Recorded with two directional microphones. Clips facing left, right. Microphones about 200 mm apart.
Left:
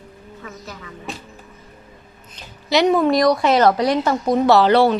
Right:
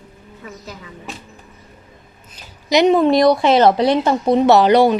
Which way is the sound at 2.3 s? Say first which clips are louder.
Right 3 dB; 20° right (ahead or behind).